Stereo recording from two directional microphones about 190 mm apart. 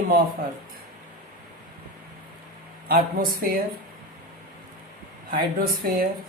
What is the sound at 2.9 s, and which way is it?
Speech, 50° right (ahead or behind).